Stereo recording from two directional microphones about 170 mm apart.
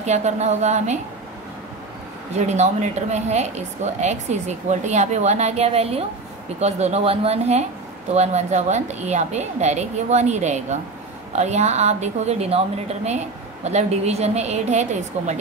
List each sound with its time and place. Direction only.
0.0 s speech: 40° right (ahead or behind)
2.3 s speech: 40° right (ahead or behind)